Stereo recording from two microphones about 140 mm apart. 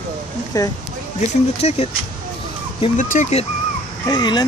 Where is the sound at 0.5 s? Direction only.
25° left (ahead or behind).